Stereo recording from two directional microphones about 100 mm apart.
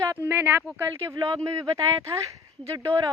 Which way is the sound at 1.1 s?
35° right (ahead or behind).